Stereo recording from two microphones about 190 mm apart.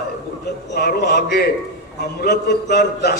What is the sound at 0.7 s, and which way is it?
A man's voice, 55° left (ahead or behind).